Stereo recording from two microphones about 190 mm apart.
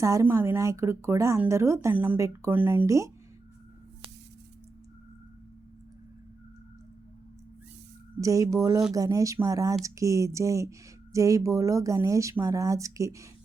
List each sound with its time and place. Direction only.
0.0 s speech: 15° right (ahead or behind)
8.2 s speech: 15° right (ahead or behind)